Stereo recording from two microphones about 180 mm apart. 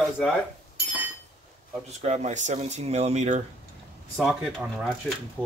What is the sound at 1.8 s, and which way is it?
Speech, 40° right (ahead or behind).